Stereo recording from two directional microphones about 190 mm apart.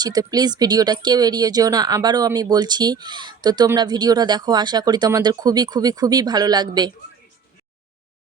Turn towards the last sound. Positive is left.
turn(degrees=-20)  # may be behind; listen again after turning